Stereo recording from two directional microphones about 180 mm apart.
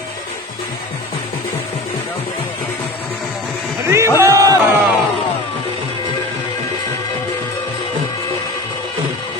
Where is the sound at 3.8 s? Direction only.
15° right (ahead or behind).